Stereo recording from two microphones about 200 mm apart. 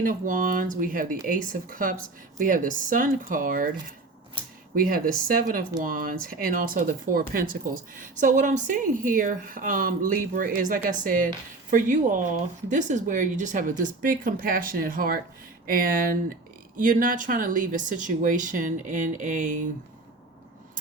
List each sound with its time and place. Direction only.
0.0 s speech: 40° right (ahead or behind)
4.7 s speech: 45° right (ahead or behind)